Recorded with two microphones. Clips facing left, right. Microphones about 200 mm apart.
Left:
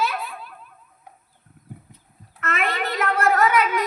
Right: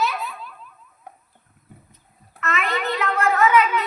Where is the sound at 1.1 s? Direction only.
55° right (ahead or behind).